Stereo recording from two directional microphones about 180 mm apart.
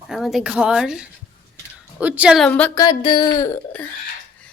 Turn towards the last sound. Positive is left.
turn(degrees=10)  # may be behind; listen again after turning